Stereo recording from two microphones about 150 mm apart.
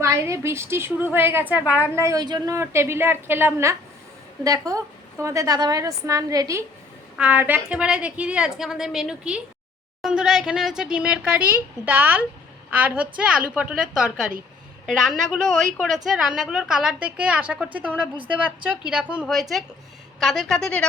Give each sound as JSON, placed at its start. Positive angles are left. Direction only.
{"t": 0.0, "sound": "a woman's voice", "side_deg": -20}
{"t": 2.0, "sound": "a woman's voice", "side_deg": -25}
{"t": 7.2, "sound": "a woman's voice", "side_deg": -10}